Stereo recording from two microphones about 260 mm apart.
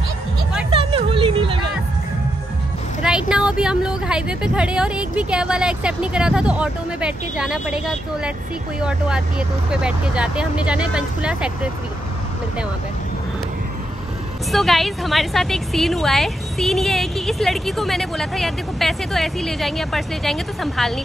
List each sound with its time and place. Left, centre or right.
0.7 s music: right
3.0 s a woman's voice: centre
9.7 s a woman's voice: centre
14.5 s a woman's voice: centre